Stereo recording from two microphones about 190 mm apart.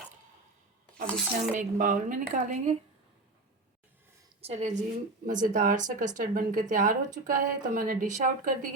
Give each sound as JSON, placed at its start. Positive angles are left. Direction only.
{"t": 1.0, "sound": "speech", "side_deg": 5}
{"t": 1.3, "sound": "speech", "side_deg": -45}
{"t": 4.4, "sound": "a woman's voice", "side_deg": -35}